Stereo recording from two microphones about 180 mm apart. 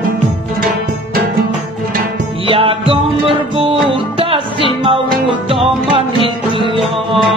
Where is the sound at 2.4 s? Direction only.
30° right (ahead or behind).